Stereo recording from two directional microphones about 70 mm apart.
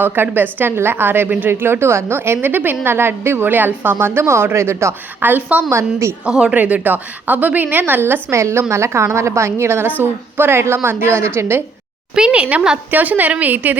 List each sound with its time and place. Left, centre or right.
0.0 s a woman's voice: right
5.2 s a woman's voice: right
6.2 s speech: centre
6.5 s a woman's voice: right
12.1 s a woman's voice: centre